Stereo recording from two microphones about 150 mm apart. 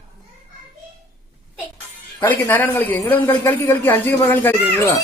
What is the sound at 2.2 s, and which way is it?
Speech, 10° left (ahead or behind).